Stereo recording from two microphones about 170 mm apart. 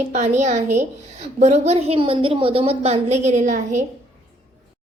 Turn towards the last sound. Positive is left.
turn(degrees=-45)  # may be behind; listen again after turning